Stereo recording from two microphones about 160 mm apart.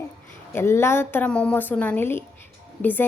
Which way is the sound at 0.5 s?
15° left (ahead or behind).